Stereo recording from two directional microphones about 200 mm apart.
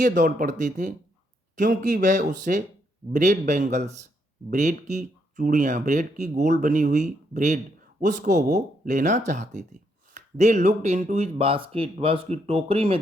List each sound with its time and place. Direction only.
0.0 s speech: 40° right (ahead or behind)